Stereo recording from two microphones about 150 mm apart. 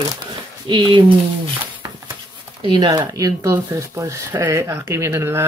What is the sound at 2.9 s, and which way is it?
Speech, 25° right (ahead or behind).